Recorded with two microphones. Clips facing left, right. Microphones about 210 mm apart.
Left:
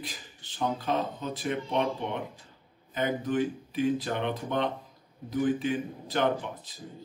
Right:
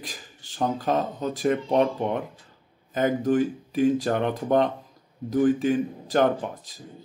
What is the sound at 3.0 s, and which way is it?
Speech, 45° right (ahead or behind).